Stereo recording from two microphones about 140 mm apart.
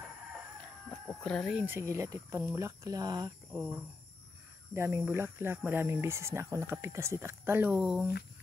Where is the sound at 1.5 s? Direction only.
15° right (ahead or behind).